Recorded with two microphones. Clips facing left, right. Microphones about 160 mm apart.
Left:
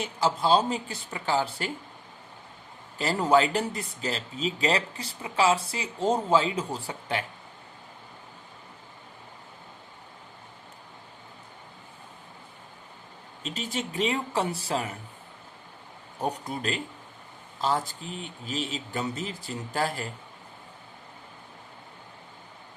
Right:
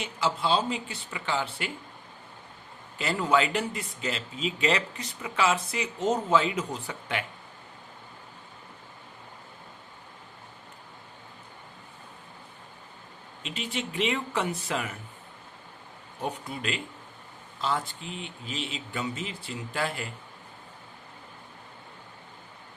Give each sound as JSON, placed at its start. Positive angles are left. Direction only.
{"t": 0.0, "sound": "speech", "side_deg": 40}
{"t": 3.0, "sound": "speech", "side_deg": 35}
{"t": 13.4, "sound": "speech", "side_deg": 40}
{"t": 16.2, "sound": "speech", "side_deg": 40}